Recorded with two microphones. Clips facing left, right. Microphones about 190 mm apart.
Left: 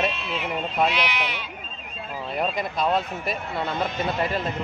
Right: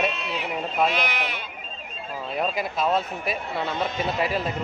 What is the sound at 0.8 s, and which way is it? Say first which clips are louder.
Speech: even; 50° right (ahead or behind).